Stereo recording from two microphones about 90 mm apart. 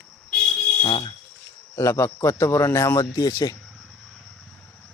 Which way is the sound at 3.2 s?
45° left (ahead or behind).